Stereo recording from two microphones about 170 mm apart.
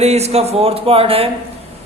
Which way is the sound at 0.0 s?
40° right (ahead or behind).